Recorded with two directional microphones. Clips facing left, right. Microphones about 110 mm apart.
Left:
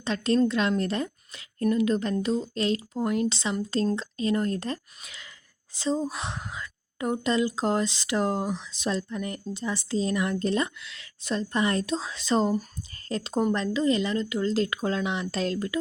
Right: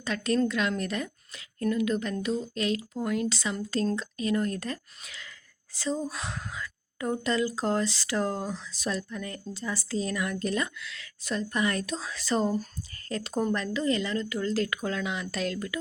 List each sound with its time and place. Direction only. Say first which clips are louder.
0.0 s a woman's voice: left 3 dB; 25° left (ahead or behind)